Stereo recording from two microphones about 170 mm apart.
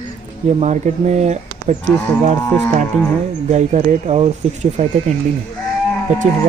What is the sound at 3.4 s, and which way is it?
Speech, 45° right (ahead or behind).